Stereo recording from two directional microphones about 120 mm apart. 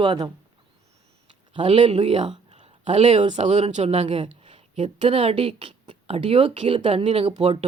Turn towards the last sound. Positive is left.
turn(degrees=-60)  # may be behind; listen again after turning